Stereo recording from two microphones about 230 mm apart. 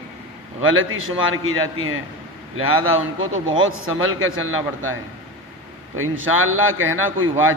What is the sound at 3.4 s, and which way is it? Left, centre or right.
A man's voice, right.